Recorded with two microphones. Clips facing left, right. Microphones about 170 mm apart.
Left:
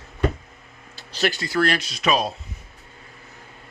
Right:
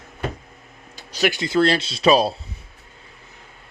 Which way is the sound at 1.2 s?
20° right (ahead or behind).